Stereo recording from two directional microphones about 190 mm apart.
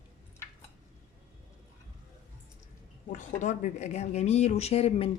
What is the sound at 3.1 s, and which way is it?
Speech, 40° left (ahead or behind).